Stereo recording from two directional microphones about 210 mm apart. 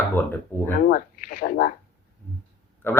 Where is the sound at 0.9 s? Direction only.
45° left (ahead or behind).